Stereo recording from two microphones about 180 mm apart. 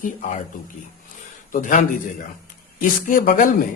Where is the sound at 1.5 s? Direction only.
45° left (ahead or behind).